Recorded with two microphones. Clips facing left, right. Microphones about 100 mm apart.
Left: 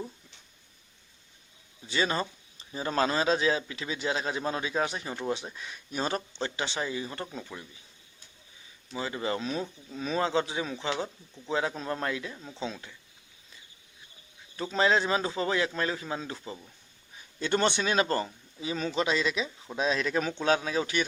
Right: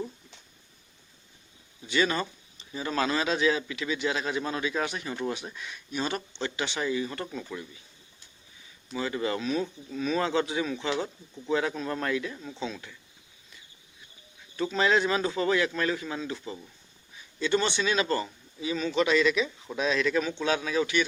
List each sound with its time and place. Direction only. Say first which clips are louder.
1.9 s a man's voice: right 2 dB; 30° left (ahead or behind)
8.9 s speech: right 2 dB; 25° left (ahead or behind)
12.5 s speech: left 2 dB; 25° left (ahead or behind)
14.7 s speech: even; 30° left (ahead or behind)
17.4 s a man's voice: even; 50° left (ahead or behind); by 21.0 s 35° left (ahead or behind)